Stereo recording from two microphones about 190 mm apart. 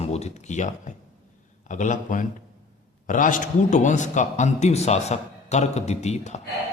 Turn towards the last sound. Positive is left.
turn(degrees=35)  # may be behind; listen again after turning